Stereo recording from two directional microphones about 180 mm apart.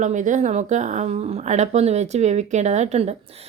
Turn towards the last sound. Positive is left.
turn(degrees=-40)  # may be behind; listen again after turning